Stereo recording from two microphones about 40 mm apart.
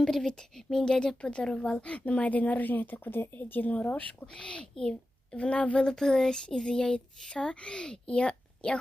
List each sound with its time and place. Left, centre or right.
0.0 s speech: centre; by 4.0 s left
4.3 s a child's voice: left
5.9 s speech: centre